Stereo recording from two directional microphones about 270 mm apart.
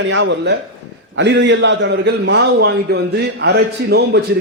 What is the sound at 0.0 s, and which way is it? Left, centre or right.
A man's voice, right.